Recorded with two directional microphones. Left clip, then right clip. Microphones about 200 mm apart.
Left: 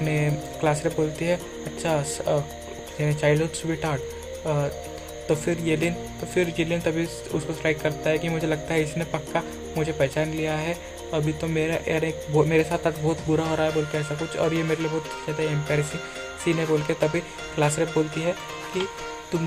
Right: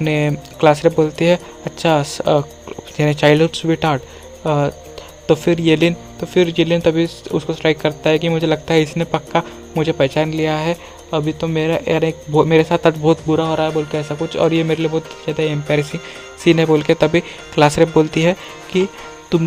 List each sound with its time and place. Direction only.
0.0 s speech: 45° right (ahead or behind)